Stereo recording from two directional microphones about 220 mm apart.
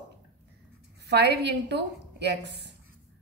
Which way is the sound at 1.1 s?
50° right (ahead or behind).